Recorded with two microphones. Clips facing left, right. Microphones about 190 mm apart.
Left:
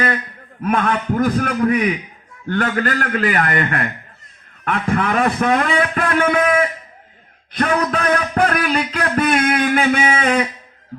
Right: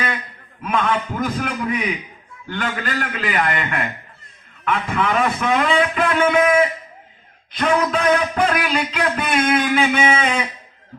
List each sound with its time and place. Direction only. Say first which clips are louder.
0.6 s a man's voice: left 2 dB; 55° left (ahead or behind)
7.9 s a man's voice: right 1 dB; 55° left (ahead or behind)
9.6 s a sound: left 1 dB; 50° left (ahead or behind)